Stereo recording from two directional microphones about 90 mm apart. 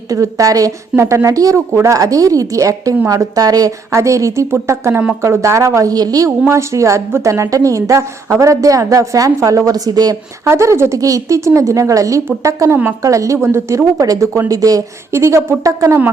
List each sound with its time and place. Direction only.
0.1 s a woman's voice: 40° right (ahead or behind)
10.4 s a woman's voice: 30° right (ahead or behind)